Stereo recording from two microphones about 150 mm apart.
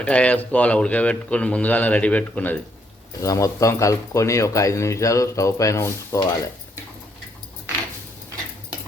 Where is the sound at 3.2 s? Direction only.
20° left (ahead or behind).